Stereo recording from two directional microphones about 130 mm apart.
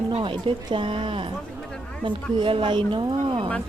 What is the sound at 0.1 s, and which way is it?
Speech, 40° right (ahead or behind).